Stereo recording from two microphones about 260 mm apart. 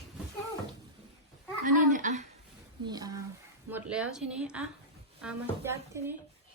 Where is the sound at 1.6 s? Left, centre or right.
Right.